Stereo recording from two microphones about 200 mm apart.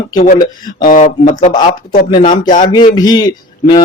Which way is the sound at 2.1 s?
20° left (ahead or behind).